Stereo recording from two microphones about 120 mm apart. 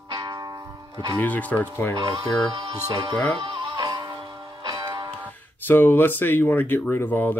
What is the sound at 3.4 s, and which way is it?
Music, 45° right (ahead or behind).